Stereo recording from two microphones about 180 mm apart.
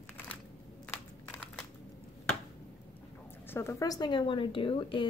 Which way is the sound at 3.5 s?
15° left (ahead or behind).